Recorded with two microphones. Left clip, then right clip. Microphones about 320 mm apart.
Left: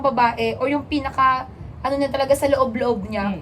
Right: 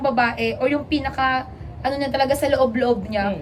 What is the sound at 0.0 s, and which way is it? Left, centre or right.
A woman's voice, centre.